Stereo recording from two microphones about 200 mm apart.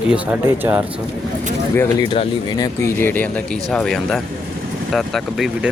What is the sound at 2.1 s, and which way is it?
Speech, 25° left (ahead or behind).